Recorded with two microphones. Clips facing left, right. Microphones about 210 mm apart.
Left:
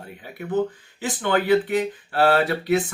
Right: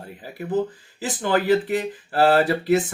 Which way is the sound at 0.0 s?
Centre (ahead or behind).